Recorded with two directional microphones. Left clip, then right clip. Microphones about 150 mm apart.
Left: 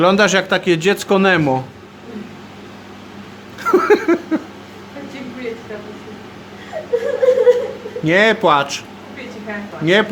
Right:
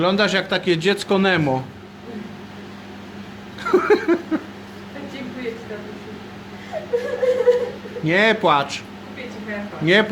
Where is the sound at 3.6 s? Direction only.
10° left (ahead or behind).